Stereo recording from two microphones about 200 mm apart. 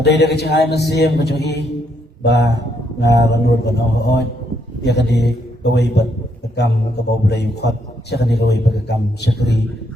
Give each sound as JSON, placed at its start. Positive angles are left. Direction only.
{"t": 0.0, "sound": "a man's voice", "side_deg": 55}